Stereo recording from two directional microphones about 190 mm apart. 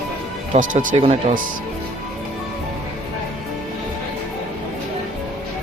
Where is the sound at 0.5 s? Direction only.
45° right (ahead or behind).